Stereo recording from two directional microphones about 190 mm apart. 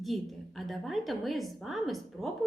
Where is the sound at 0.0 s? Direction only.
Centre (ahead or behind).